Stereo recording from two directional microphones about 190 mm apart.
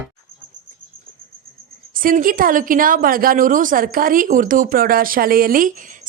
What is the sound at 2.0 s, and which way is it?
A woman's voice, 45° right (ahead or behind).